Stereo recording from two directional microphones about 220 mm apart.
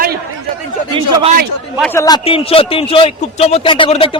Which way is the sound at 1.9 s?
15° left (ahead or behind).